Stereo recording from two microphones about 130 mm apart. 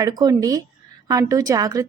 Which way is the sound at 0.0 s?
30° right (ahead or behind).